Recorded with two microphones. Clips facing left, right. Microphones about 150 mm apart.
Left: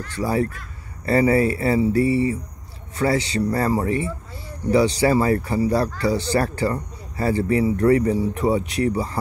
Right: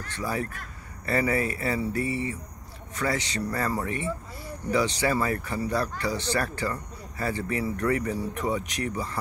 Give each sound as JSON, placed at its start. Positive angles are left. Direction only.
{"t": 0.1, "sound": "speech", "side_deg": 35}